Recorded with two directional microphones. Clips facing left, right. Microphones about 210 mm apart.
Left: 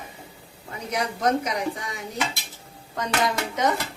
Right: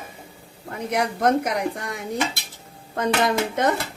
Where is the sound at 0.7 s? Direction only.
55° right (ahead or behind).